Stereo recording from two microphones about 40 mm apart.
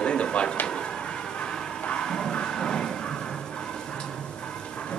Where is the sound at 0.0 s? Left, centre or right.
Left.